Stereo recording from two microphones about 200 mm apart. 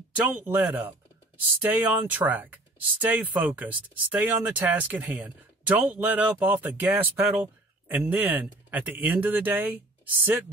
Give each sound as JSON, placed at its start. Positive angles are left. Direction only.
{"t": 0.1, "sound": "speech", "side_deg": -5}